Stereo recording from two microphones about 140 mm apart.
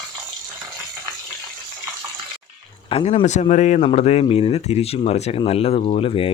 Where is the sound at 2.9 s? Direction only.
45° left (ahead or behind).